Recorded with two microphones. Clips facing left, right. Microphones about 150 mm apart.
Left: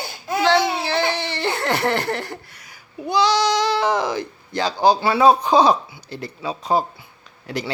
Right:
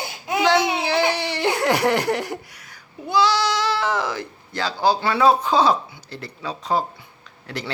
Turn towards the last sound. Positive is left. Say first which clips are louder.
# left 4 dB
turn(degrees=15)  # may be behind; listen again after turning